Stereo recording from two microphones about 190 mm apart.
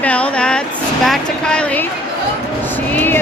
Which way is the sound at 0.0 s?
5° left (ahead or behind).